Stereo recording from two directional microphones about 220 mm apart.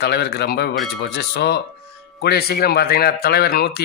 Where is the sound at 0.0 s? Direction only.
45° left (ahead or behind).